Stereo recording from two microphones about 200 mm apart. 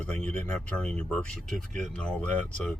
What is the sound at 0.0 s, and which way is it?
Speech, 5° left (ahead or behind).